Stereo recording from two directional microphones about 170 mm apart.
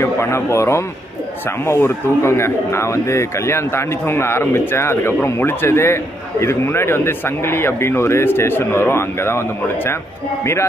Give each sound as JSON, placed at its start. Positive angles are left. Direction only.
{"t": 0.0, "sound": "a man's voice", "side_deg": 15}
{"t": 10.4, "sound": "a man's voice", "side_deg": 15}